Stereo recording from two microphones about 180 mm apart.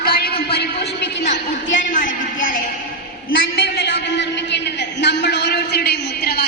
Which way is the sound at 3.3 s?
60° left (ahead or behind).